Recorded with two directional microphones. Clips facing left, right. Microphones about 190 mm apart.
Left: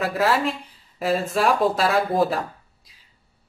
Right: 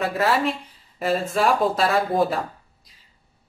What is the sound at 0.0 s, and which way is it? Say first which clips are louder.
Speech: even; centre (ahead or behind).